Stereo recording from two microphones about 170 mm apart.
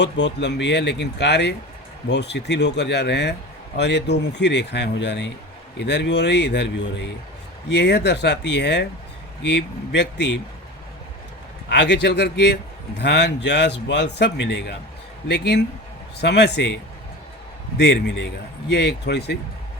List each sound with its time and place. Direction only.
0.0 s a man's voice: 90° left
11.7 s a man's voice: 90° left
17.7 s a man's voice: 85° left
18.7 s speech: 80° left